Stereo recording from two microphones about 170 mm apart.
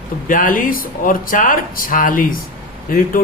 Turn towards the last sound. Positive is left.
turn(degrees=55)  # may be behind; listen again after turning